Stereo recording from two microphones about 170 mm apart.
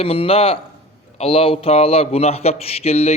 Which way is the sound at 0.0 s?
35° left (ahead or behind).